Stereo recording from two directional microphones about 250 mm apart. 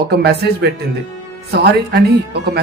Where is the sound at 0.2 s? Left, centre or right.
Right.